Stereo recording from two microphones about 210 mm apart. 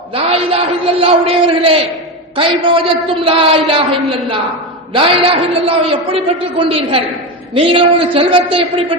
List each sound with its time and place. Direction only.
0.1 s a man's voice: 25° right (ahead or behind)
4.9 s a man's voice: 25° right (ahead or behind)